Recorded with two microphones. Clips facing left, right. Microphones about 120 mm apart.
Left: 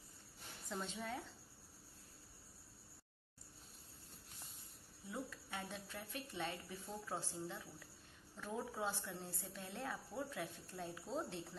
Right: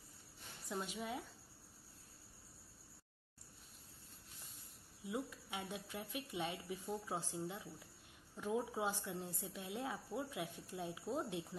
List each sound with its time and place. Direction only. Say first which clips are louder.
0.7 s a woman's voice: right 2 dB; 10° right (ahead or behind)
5.0 s a woman's voice: right 4 dB; 15° right (ahead or behind)